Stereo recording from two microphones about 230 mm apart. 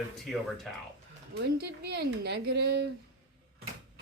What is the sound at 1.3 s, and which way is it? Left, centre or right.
Speech, right.